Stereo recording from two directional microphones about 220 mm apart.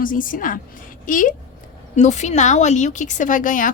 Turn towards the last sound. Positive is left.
turn(degrees=35)  # may be behind; listen again after turning